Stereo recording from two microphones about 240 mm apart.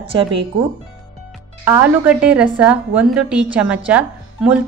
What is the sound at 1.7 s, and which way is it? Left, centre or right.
A woman's voice, centre.